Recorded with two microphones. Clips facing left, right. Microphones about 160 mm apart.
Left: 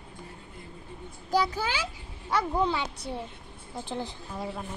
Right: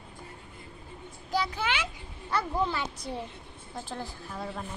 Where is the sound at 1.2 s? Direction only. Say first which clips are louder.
Left 3 dB; 40° left (ahead or behind).